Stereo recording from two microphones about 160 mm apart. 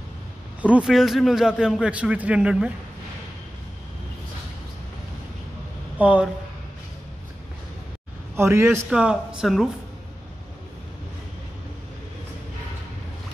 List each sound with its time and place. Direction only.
0.6 s a man's voice: 10° right (ahead or behind)
5.9 s speech: 5° right (ahead or behind)
8.4 s a man's voice: 15° right (ahead or behind)